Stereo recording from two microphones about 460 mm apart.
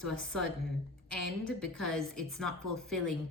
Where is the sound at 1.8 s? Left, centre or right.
Centre.